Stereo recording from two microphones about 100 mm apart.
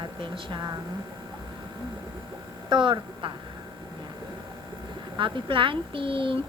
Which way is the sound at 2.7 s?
55° right (ahead or behind).